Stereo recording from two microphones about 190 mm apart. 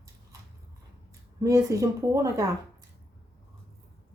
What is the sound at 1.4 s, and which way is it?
Speech, 15° right (ahead or behind).